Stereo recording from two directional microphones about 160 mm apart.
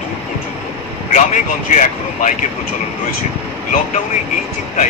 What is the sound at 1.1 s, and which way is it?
Speech, 50° left (ahead or behind).